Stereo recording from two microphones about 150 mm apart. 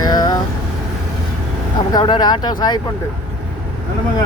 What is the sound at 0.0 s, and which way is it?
Vehicle, 25° left (ahead or behind).